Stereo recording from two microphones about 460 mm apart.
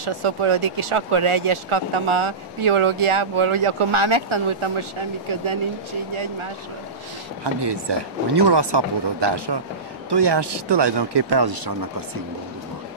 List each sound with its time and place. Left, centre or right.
0.0 s speech: right
7.6 s speech: right